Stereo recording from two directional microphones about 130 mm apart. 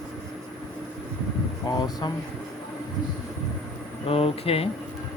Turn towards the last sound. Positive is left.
turn(degrees=50)  # may be behind; listen again after turning